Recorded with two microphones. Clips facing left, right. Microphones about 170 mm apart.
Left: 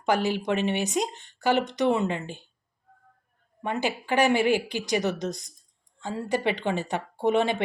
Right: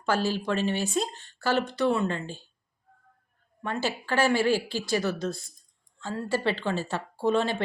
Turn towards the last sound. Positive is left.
turn(degrees=20)  # may be behind; listen again after turning